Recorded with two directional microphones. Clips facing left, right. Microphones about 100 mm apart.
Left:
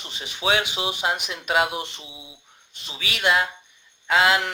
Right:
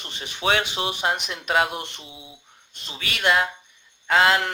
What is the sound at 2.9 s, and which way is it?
Speech, 50° right (ahead or behind).